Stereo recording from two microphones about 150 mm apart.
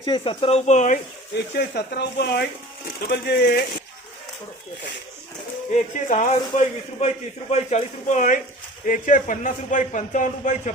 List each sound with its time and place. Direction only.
0.0 s a man's voice: 30° left (ahead or behind); by 0.9 s 50° left (ahead or behind)
1.5 s speech: 90° left
5.7 s a man's voice: 55° left (ahead or behind)